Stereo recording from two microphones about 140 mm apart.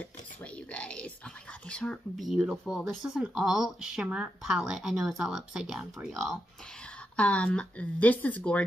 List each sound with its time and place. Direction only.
0.0 s a sound: 10° left (ahead or behind)
1.7 s speech: 5° left (ahead or behind)
7.2 s speech: 10° left (ahead or behind)